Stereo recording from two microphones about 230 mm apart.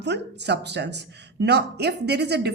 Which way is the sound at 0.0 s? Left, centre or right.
Right.